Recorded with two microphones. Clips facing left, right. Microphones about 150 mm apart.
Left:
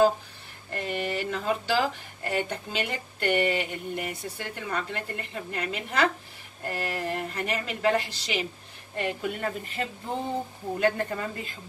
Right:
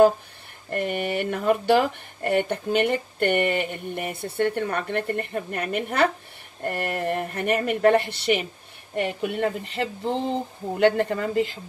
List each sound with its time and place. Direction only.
0.7 s a woman's voice: 55° right (ahead or behind); by 11.5 s 75° right (ahead or behind)